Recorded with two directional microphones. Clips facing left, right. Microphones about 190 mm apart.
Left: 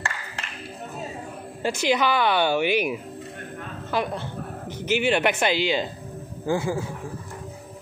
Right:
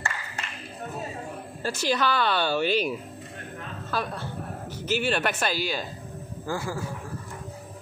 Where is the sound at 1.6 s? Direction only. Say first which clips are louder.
Left 4 dB; 15° left (ahead or behind).